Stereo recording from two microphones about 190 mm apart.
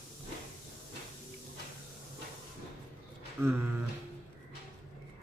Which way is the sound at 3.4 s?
10° right (ahead or behind).